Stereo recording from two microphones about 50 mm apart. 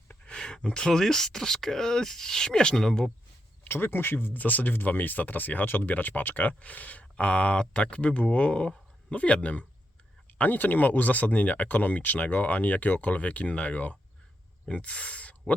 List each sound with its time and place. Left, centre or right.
0.3 s speech: centre
3.6 s a man's voice: left